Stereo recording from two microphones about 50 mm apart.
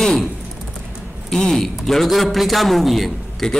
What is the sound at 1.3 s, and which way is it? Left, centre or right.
A man's voice, centre.